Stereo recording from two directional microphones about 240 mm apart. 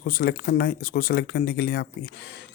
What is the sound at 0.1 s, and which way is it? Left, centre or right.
Speech, left.